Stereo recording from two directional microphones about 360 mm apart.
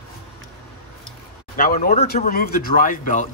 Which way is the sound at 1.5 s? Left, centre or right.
Left.